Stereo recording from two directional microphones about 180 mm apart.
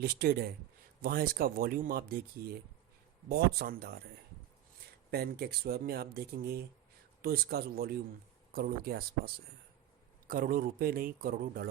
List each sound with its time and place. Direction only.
0.0 s speech: 60° right (ahead or behind)
5.1 s speech: 60° right (ahead or behind)